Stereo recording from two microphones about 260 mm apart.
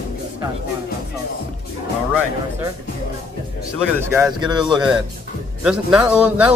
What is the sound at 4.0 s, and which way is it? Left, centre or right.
A man's voice, centre.